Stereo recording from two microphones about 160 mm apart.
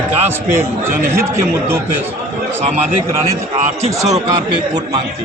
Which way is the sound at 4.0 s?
20° right (ahead or behind).